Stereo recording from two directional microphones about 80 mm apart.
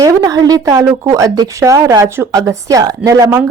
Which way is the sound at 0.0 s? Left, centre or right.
Right.